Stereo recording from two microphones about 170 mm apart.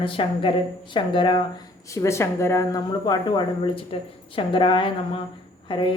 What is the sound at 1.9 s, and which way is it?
Speech, 15° left (ahead or behind).